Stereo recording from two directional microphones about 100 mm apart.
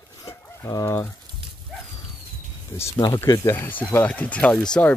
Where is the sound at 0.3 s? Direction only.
30° left (ahead or behind).